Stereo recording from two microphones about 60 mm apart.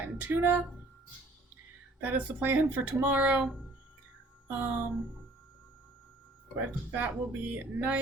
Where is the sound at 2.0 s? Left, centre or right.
Right.